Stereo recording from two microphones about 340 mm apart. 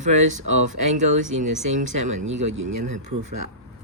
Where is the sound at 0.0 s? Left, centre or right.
Right.